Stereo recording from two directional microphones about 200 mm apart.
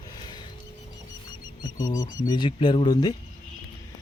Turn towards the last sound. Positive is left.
turn(degrees=20)  # may be behind; listen again after turning